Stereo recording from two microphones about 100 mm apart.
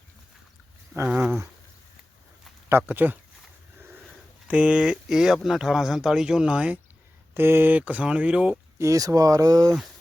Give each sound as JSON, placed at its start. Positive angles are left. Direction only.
{"t": 1.0, "sound": "a sound", "side_deg": -15}
{"t": 2.6, "sound": "speech", "side_deg": -20}
{"t": 4.4, "sound": "speech", "side_deg": -10}
{"t": 7.3, "sound": "speech", "side_deg": -20}
{"t": 8.8, "sound": "speech", "side_deg": -35}